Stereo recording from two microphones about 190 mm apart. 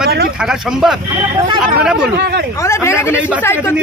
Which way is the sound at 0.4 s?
Centre (ahead or behind).